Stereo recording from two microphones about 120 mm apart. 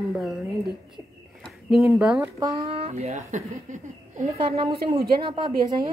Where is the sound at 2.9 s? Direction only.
85° right.